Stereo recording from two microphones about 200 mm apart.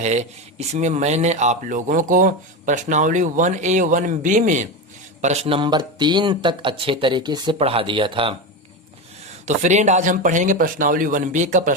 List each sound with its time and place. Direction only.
0.0 s speech: 35° right (ahead or behind)
9.5 s speech: 35° right (ahead or behind)